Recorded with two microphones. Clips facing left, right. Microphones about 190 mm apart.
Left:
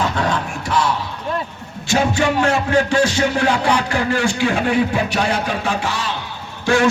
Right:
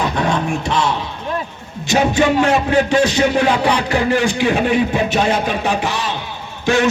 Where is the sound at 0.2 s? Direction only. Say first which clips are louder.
Right 3 dB; 25° right (ahead or behind).